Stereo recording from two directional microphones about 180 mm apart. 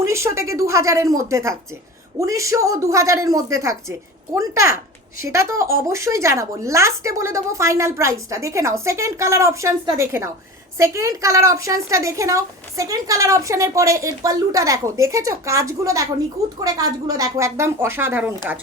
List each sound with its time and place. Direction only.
0.0 s speech: 15° right (ahead or behind)